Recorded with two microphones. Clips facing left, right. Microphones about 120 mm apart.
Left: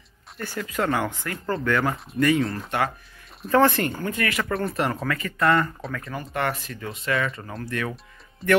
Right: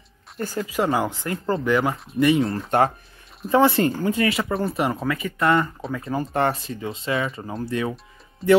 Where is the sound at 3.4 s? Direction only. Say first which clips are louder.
Right 1 dB; 10° right (ahead or behind).